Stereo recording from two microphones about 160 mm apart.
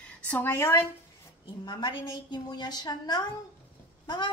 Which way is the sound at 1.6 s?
25° left (ahead or behind).